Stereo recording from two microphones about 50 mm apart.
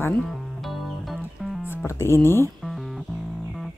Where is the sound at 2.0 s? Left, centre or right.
Left.